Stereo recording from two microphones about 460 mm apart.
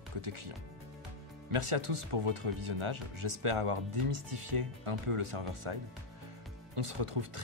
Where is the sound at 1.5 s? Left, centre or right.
Right.